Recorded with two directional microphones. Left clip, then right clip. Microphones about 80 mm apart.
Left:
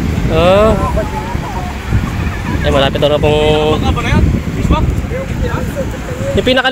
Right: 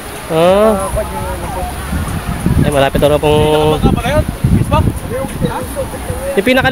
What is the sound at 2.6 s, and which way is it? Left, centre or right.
Speech, right.